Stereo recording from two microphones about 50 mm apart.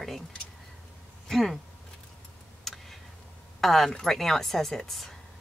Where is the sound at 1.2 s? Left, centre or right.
Centre.